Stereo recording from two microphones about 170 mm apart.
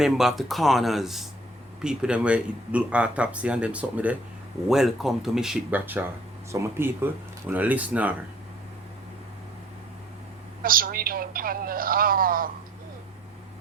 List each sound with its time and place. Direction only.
0.0 s speech: centre (ahead or behind)
10.6 s a woman's voice: 55° right (ahead or behind)